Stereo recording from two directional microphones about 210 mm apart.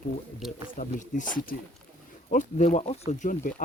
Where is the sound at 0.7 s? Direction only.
35° left (ahead or behind).